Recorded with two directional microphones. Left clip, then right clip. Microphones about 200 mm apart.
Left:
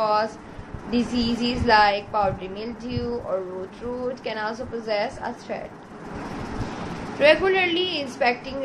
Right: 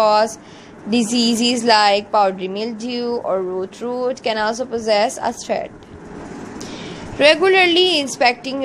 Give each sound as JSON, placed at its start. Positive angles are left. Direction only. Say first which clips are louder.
{"t": 0.0, "sound": "a sound", "louder": "right 8 dB", "side_deg": -50}
{"t": 0.8, "sound": "a woman's voice", "louder": "right 7 dB", "side_deg": -50}
{"t": 7.2, "sound": "a woman's voice", "louder": "right 6 dB", "side_deg": -50}